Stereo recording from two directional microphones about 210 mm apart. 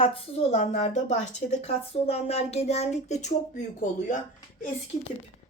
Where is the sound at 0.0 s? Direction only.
25° left (ahead or behind).